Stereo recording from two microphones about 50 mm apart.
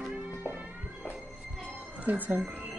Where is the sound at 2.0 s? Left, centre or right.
Right.